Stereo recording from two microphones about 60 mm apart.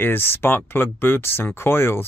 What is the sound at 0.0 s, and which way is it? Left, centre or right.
Speech, left.